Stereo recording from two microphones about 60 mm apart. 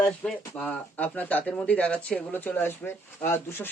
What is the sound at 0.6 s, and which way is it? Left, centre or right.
Speech, left.